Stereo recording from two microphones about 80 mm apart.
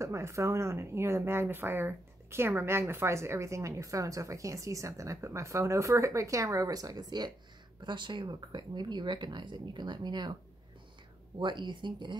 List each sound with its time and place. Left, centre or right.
0.0 s speech: right
7.8 s speech: right
11.3 s speech: right